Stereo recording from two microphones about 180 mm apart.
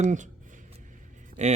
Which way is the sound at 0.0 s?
40° right (ahead or behind).